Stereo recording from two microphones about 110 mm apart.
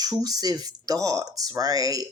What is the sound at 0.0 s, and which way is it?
Speech, 35° right (ahead or behind).